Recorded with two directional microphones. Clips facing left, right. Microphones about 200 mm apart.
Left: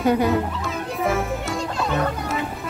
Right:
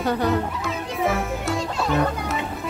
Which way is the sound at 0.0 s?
15° left (ahead or behind).